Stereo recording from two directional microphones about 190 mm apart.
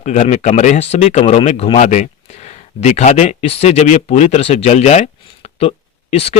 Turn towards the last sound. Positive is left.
turn(degrees=30)  # may be behind; listen again after turning